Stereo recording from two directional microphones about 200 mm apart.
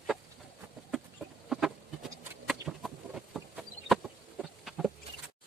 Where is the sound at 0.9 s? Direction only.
Centre (ahead or behind).